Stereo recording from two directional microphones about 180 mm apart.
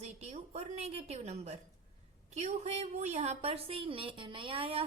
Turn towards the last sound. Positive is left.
turn(degrees=-30)  # may be behind; listen again after turning